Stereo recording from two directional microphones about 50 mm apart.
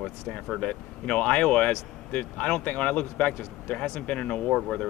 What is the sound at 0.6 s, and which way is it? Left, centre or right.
Speech, left.